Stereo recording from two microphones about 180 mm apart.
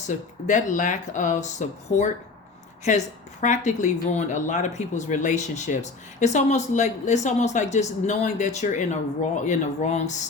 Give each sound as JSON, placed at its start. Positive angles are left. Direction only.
{"t": 0.4, "sound": "speech", "side_deg": 45}